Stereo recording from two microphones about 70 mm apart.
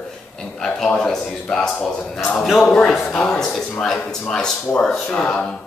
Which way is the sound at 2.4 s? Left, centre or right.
Centre.